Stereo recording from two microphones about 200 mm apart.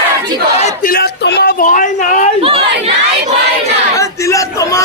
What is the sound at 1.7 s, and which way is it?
Speech, 40° left (ahead or behind).